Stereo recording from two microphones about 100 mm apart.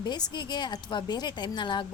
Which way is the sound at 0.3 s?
45° left (ahead or behind).